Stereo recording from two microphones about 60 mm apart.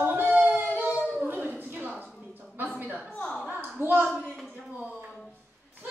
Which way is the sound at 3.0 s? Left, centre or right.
Left.